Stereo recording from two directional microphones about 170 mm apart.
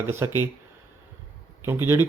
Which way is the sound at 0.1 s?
15° right (ahead or behind).